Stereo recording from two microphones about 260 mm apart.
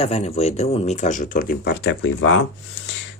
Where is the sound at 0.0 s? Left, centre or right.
Left.